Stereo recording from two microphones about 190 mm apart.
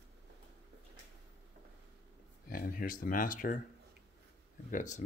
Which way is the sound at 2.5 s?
45° left (ahead or behind).